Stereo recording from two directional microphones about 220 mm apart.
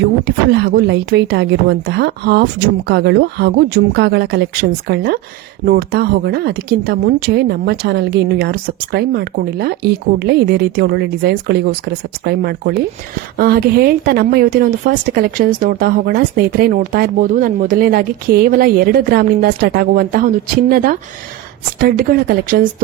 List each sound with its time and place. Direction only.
0.0 s speech: 50° right (ahead or behind)